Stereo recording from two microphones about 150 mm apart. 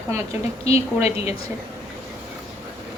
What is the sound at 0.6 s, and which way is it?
Speech, 45° left (ahead or behind).